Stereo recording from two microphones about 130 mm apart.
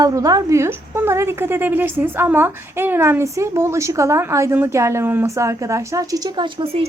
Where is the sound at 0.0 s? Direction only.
25° right (ahead or behind).